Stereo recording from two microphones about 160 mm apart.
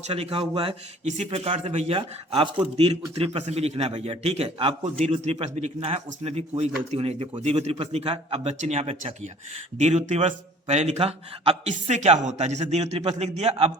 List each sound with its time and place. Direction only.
0.1 s speech: 35° right (ahead or behind)
1.0 s a man's voice: 50° right (ahead or behind)